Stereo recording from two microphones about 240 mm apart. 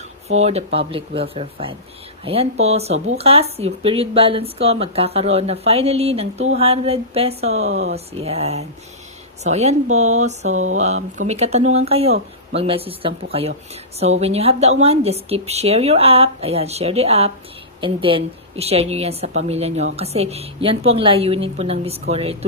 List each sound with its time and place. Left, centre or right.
0.3 s a woman's voice: right